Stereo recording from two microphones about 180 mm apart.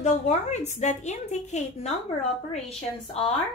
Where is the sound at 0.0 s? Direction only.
40° left (ahead or behind).